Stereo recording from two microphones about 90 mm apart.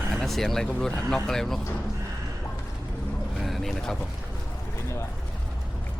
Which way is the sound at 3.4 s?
Centre (ahead or behind).